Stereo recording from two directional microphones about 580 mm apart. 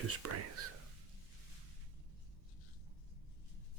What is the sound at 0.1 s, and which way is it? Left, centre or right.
Speech, right.